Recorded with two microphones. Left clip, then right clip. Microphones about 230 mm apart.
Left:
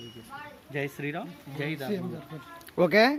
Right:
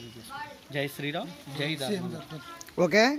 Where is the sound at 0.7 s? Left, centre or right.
Centre.